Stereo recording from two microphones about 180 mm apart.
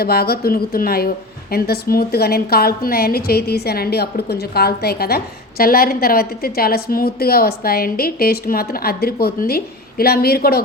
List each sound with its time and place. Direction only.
0.0 s speech: 60° left (ahead or behind)